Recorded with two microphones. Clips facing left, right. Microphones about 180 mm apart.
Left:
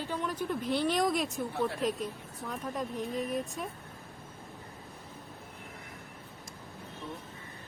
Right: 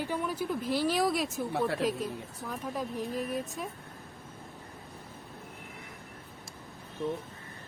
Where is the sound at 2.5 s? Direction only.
Centre (ahead or behind).